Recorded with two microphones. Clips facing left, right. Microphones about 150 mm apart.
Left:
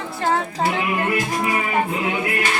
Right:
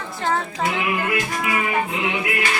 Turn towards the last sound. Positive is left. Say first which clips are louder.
# left 2 dB
turn(degrees=30)  # may be behind; listen again after turning